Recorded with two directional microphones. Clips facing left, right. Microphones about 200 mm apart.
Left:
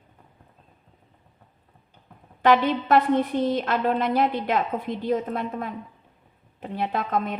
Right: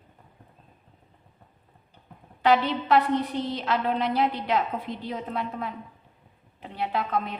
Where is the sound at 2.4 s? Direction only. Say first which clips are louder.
Left 2 dB; 50° left (ahead or behind).